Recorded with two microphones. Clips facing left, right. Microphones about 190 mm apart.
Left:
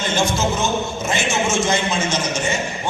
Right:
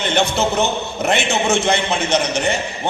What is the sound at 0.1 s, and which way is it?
A man's voice, 65° right (ahead or behind).